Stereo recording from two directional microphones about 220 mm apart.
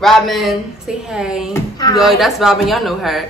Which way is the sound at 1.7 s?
20° left (ahead or behind).